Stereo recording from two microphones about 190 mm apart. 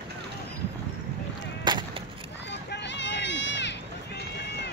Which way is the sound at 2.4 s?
65° left (ahead or behind).